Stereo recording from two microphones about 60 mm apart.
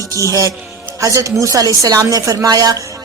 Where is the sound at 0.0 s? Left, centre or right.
Right.